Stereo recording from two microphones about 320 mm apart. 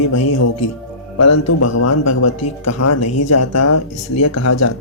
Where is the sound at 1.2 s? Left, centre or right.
Left.